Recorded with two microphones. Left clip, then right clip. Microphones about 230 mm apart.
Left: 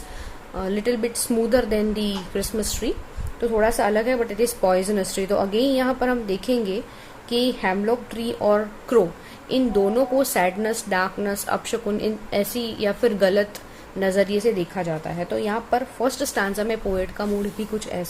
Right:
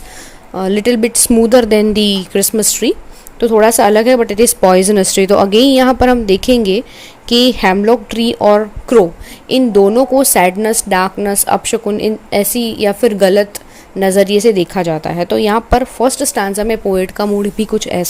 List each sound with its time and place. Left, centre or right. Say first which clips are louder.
0.5 s a woman's voice: right 11 dB; right